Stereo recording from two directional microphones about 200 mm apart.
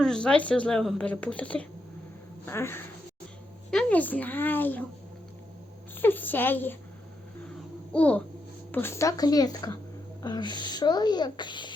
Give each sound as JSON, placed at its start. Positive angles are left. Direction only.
{"t": 0.0, "sound": "speech", "side_deg": 5}
{"t": 6.0, "sound": "speech", "side_deg": 10}
{"t": 7.9, "sound": "speech", "side_deg": 5}